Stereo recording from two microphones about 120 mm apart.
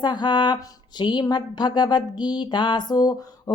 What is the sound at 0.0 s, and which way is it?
Speech, 40° left (ahead or behind).